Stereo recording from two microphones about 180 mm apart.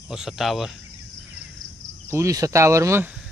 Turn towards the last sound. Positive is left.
turn(degrees=-15)  # may be behind; listen again after turning